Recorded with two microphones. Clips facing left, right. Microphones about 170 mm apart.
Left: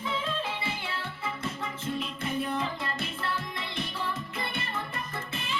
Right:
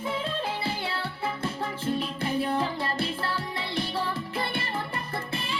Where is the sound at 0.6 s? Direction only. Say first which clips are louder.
Right 4 dB; 35° right (ahead or behind).